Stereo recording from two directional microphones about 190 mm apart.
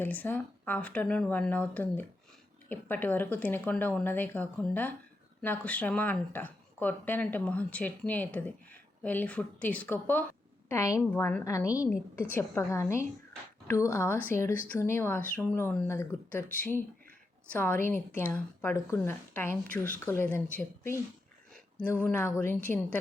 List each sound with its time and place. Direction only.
0.0 s a woman's voice: 10° left (ahead or behind)